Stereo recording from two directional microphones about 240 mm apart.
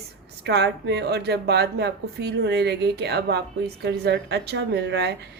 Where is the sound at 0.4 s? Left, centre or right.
Right.